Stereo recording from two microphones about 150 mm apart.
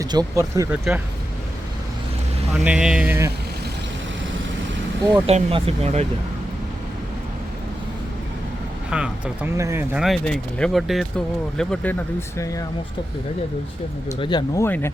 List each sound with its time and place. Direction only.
0.0 s speech: 25° right (ahead or behind)
0.7 s speech: 10° right (ahead or behind)
2.6 s speech: 5° right (ahead or behind)
5.2 s speech: 40° right (ahead or behind)
8.9 s speech: 5° right (ahead or behind)
9.6 s speech: 20° right (ahead or behind)
9.9 s speech: centre (ahead or behind); by 12.6 s 15° left (ahead or behind)
14.2 s speech: 30° left (ahead or behind)
14.6 s speech: 15° left (ahead or behind)